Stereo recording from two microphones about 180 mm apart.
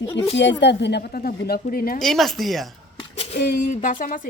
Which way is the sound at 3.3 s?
45° left (ahead or behind).